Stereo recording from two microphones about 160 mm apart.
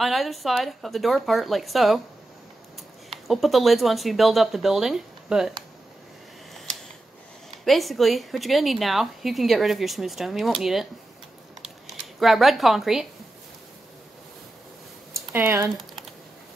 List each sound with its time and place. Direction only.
0.0 s speech: centre (ahead or behind)
3.1 s speech: centre (ahead or behind)
7.6 s speech: centre (ahead or behind)
11.6 s a sound: centre (ahead or behind)
15.1 s speech: 15° right (ahead or behind)